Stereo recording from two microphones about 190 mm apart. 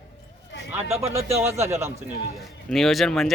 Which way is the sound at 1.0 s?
35° right (ahead or behind).